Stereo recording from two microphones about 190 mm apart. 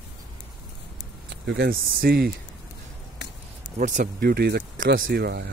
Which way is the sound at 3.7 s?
40° right (ahead or behind).